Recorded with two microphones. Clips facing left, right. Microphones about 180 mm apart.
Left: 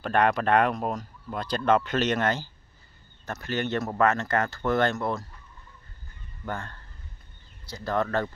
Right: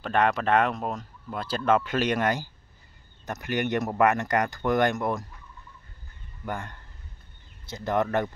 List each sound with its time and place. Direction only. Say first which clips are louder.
0.0 s speech: left 1 dB; centre (ahead or behind); by 5.2 s 15° right (ahead or behind)
6.4 s speech: right 1 dB; 15° right (ahead or behind)